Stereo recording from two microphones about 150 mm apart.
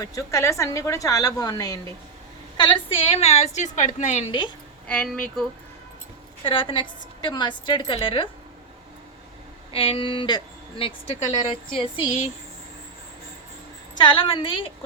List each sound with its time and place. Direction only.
0.0 s a woman's voice: 20° left (ahead or behind)
2.6 s a woman's voice: 35° left (ahead or behind); by 4.2 s 50° left (ahead or behind)
4.9 s speech: 5° left (ahead or behind)
6.4 s a woman's voice: 35° left (ahead or behind)
9.7 s a woman's voice: 35° left (ahead or behind)
14.0 s a woman's voice: 35° left (ahead or behind)